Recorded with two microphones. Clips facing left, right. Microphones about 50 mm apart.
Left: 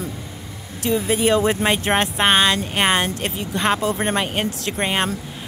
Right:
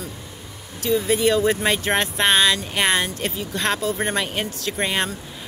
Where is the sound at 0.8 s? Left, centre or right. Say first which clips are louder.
Even; centre.